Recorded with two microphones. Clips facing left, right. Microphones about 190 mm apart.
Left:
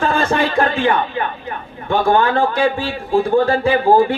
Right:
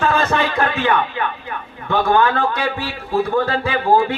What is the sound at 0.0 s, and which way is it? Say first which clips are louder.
Music: left 1 dB; 30° left (ahead or behind).